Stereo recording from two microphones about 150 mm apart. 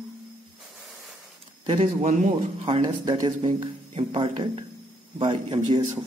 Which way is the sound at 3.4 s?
40° right (ahead or behind).